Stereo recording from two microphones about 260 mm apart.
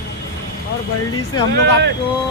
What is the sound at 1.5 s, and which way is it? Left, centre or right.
Speech, right.